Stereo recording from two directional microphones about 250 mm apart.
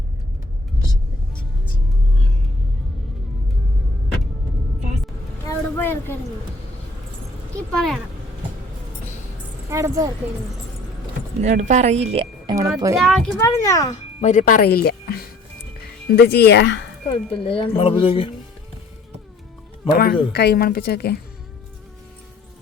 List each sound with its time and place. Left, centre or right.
5.5 s vehicle: centre
7.7 s speech: centre
9.6 s speech: centre
11.4 s speech: right
13.0 s a child's voice: centre
13.9 s speech: left
17.1 s speech: left
19.9 s speech: left